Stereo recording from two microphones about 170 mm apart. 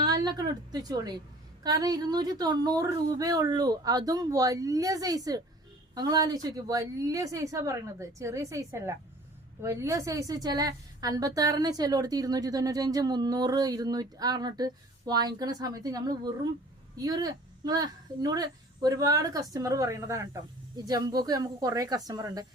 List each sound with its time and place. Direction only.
0.0 s a woman's voice: 25° right (ahead or behind)